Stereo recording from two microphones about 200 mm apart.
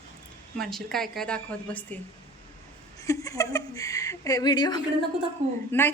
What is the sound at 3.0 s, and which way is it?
Speech, 15° left (ahead or behind).